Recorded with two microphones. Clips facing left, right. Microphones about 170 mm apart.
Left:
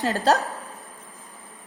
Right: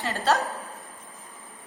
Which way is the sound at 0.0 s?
40° left (ahead or behind).